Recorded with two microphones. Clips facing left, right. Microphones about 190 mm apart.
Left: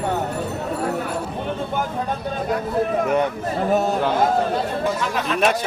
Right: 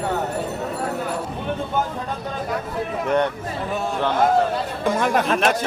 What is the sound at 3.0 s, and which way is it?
Speech, 5° left (ahead or behind).